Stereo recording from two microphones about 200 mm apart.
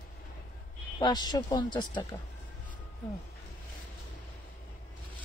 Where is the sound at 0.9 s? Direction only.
20° left (ahead or behind).